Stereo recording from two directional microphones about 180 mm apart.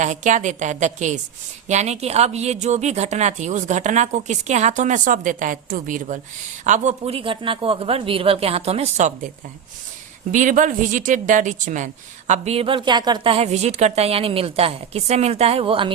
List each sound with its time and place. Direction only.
0.0 s a woman's voice: 40° right (ahead or behind)
10.3 s a woman's voice: 45° right (ahead or behind); by 15.9 s 30° right (ahead or behind)